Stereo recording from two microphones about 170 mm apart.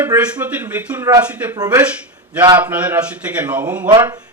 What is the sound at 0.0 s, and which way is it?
Speech, 10° right (ahead or behind).